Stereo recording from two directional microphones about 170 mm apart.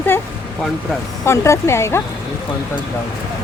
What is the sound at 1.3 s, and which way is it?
Speech, 15° left (ahead or behind).